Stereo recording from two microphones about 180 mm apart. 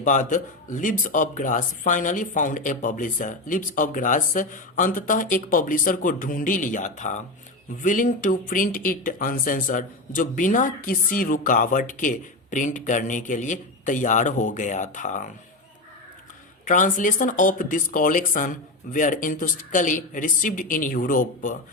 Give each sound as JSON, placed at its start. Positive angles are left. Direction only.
{"t": 0.0, "sound": "speech", "side_deg": 45}
{"t": 16.6, "sound": "speech", "side_deg": 45}